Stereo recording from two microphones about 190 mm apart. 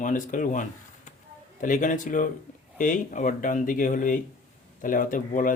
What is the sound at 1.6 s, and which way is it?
Speech, 45° left (ahead or behind).